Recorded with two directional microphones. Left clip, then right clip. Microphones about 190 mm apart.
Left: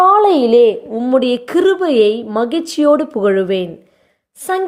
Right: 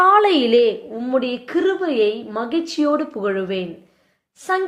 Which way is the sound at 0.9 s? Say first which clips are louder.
Left 7 dB; 45° left (ahead or behind).